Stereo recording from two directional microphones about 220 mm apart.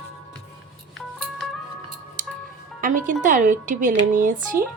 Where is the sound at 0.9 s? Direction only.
Centre (ahead or behind).